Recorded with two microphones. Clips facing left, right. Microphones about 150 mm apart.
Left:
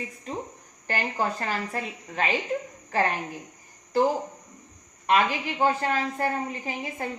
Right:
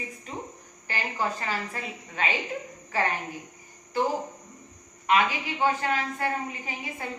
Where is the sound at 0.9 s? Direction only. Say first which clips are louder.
Left 3 dB; 45° left (ahead or behind).